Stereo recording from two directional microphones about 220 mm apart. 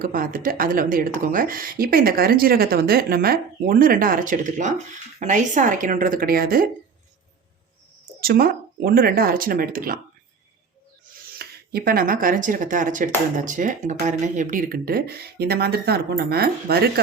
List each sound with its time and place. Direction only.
0.0 s speech: 40° right (ahead or behind)
8.2 s speech: 40° right (ahead or behind)
11.3 s speech: 45° right (ahead or behind)